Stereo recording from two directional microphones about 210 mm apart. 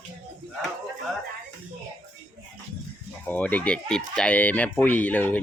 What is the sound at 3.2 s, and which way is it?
Speech, 10° left (ahead or behind).